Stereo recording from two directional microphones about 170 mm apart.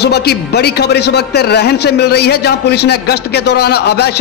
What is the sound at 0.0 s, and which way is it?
A man's voice, 70° left (ahead or behind).